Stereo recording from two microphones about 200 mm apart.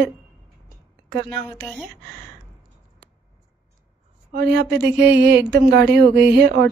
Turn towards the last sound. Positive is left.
turn(degrees=-55)  # may be behind; listen again after turning